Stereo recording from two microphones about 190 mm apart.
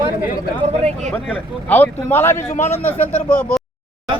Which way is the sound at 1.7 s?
10° left (ahead or behind).